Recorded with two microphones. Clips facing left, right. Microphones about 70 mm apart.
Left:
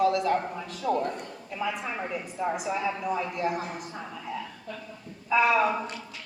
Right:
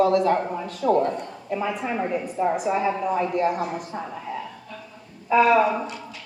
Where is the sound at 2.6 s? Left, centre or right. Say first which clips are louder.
Right 7 dB; right.